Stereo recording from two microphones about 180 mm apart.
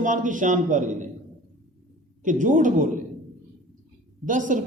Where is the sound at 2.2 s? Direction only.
45° right (ahead or behind).